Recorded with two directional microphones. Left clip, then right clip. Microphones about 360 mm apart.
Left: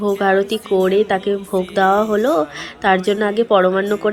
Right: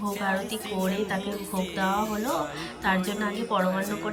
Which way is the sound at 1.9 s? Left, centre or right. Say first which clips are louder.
Left 13 dB; right.